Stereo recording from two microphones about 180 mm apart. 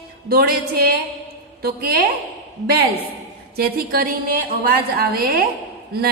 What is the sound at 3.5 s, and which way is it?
A woman's voice, 55° right (ahead or behind).